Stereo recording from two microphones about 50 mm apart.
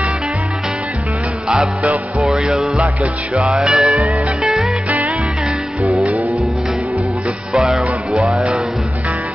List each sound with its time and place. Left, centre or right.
1.8 s music: right
3.6 s music: centre
4.8 s music: right
7.5 s music: centre